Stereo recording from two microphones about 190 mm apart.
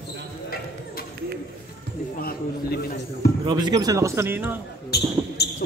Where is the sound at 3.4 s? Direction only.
20° right (ahead or behind).